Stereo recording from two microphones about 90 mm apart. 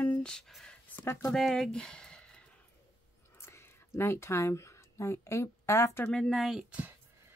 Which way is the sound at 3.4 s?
30° left (ahead or behind).